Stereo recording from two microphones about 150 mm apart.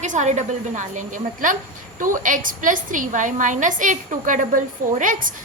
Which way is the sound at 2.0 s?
60° right (ahead or behind).